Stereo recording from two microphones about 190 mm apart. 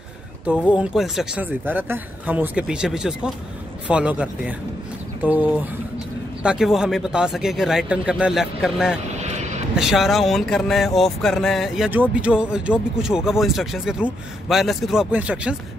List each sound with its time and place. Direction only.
0.5 s speech: 5° right (ahead or behind)
9.1 s vehicle: 35° right (ahead or behind)
9.8 s speech: centre (ahead or behind)